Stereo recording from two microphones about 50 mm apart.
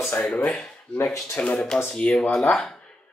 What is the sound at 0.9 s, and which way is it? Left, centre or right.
Speech, centre.